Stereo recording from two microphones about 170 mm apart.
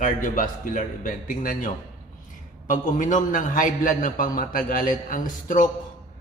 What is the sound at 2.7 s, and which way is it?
A man's voice, 50° left (ahead or behind).